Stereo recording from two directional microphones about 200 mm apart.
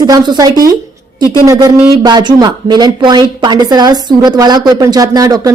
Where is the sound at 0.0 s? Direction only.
20° right (ahead or behind).